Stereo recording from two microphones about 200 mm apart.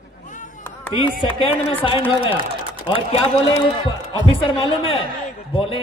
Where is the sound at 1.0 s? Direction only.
25° left (ahead or behind).